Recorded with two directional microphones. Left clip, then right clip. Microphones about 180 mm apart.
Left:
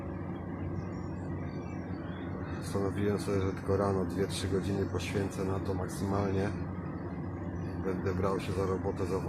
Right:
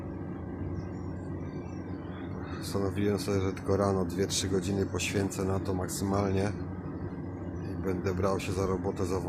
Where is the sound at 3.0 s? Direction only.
15° right (ahead or behind).